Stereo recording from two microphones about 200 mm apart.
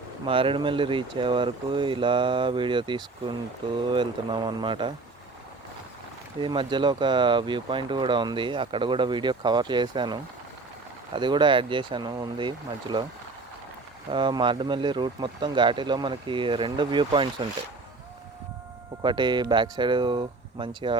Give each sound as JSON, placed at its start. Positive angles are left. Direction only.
{"t": 0.3, "sound": "speech", "side_deg": -25}
{"t": 6.4, "sound": "speech", "side_deg": -25}
{"t": 14.1, "sound": "speech", "side_deg": -25}
{"t": 19.0, "sound": "speech", "side_deg": -20}